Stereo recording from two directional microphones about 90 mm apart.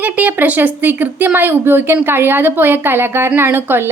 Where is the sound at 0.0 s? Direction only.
20° right (ahead or behind).